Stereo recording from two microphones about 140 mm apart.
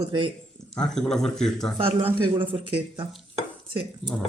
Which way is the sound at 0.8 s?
5° left (ahead or behind).